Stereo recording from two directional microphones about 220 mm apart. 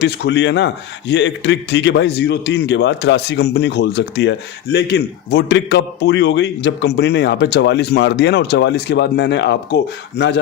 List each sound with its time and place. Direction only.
0.0 s a man's voice: 50° left (ahead or behind)